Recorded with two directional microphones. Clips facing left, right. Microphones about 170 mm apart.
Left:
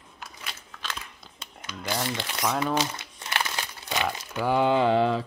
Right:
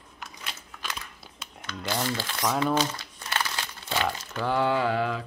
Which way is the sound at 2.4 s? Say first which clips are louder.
Right 1 dB; 5° left (ahead or behind).